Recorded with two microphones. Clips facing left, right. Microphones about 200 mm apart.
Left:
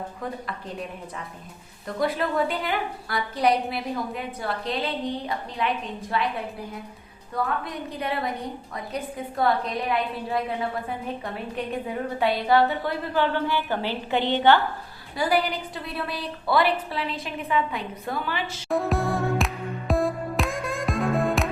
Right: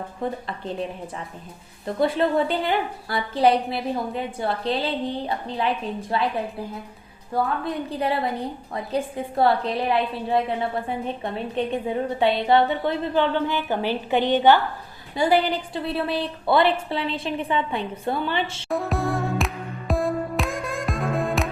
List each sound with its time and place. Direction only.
0.2 s a woman's voice: 30° right (ahead or behind)
2.0 s a woman's voice: 30° right (ahead or behind)
7.6 s a woman's voice: 30° right (ahead or behind)
18.7 s music: centre (ahead or behind)